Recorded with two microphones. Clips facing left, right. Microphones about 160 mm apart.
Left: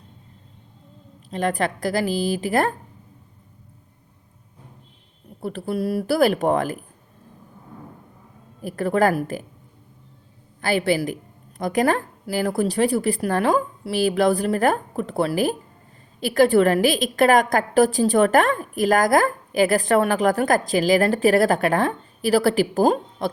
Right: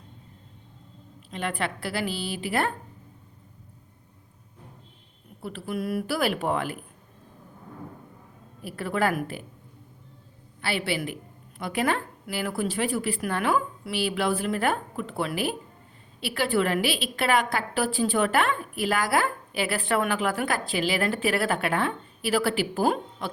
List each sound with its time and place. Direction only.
1.3 s a woman's voice: 40° left (ahead or behind)
5.4 s a woman's voice: 40° left (ahead or behind)
8.6 s a woman's voice: 40° left (ahead or behind)
10.6 s a woman's voice: 45° left (ahead or behind)